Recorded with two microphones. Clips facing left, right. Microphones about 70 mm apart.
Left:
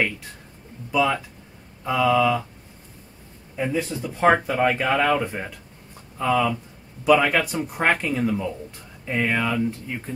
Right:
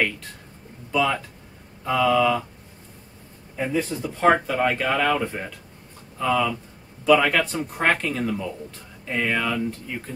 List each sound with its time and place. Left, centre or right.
0.9 s speech: centre
3.5 s speech: centre
4.1 s speech: centre